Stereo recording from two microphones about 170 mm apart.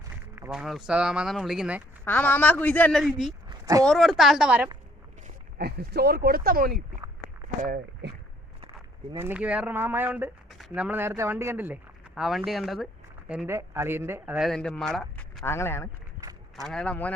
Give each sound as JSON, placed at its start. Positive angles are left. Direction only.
{"t": 0.3, "sound": "a man's voice", "side_deg": -10}
{"t": 2.0, "sound": "a man's voice", "side_deg": 10}
{"t": 3.5, "sound": "a sound", "side_deg": -20}
{"t": 3.8, "sound": "a man's voice", "side_deg": 0}
{"t": 5.5, "sound": "speech", "side_deg": -70}
{"t": 9.1, "sound": "speech", "side_deg": -10}
{"t": 14.3, "sound": "a man's voice", "side_deg": 0}